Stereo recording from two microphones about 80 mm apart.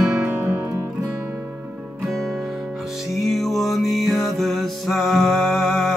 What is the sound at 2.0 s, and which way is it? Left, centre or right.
Music, centre.